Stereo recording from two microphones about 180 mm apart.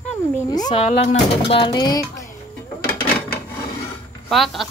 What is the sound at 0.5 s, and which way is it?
A woman's voice, 20° left (ahead or behind).